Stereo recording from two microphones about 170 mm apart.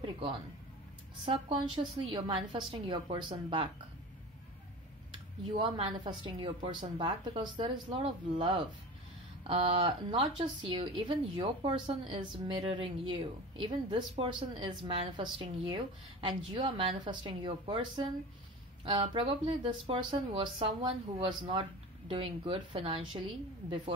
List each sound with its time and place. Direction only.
1.2 s a woman's voice: 30° right (ahead or behind)
5.1 s a woman's voice: 30° right (ahead or behind)